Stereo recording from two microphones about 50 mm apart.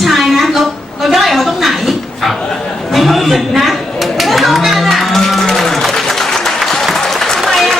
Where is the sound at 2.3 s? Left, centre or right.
Centre.